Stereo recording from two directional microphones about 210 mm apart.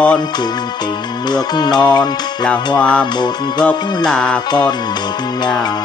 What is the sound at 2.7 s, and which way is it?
Music, 5° left (ahead or behind).